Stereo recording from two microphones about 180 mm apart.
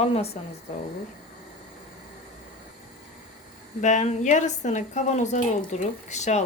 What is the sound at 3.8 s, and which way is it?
A woman's voice, 40° left (ahead or behind).